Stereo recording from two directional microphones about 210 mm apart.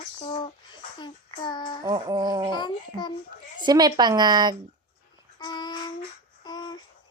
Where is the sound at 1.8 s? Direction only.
20° right (ahead or behind).